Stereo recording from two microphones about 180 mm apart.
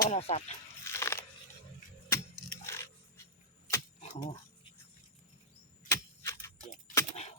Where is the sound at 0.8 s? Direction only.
15° left (ahead or behind).